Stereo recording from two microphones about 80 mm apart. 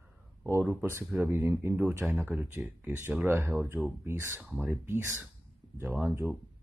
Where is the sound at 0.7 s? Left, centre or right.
Right.